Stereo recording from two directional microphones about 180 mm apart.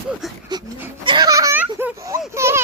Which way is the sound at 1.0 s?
25° right (ahead or behind).